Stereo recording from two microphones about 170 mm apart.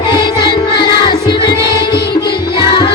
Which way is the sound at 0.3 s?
30° left (ahead or behind).